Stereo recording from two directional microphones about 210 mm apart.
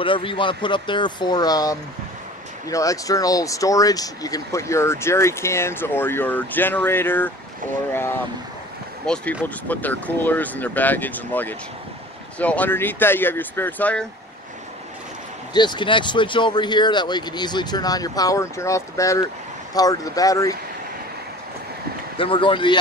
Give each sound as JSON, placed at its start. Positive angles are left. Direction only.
{"t": 0.0, "sound": "speech", "side_deg": 25}
{"t": 9.0, "sound": "speech", "side_deg": 5}
{"t": 15.5, "sound": "speech", "side_deg": 20}
{"t": 22.1, "sound": "speech", "side_deg": 25}